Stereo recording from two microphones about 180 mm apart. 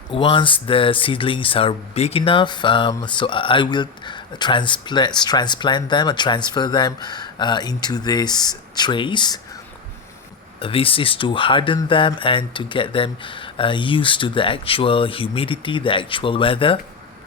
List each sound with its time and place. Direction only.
0.1 s speech: 30° left (ahead or behind)
10.6 s speech: 30° left (ahead or behind)